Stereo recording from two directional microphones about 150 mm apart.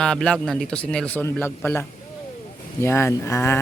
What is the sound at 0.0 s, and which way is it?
A woman's voice, 5° left (ahead or behind).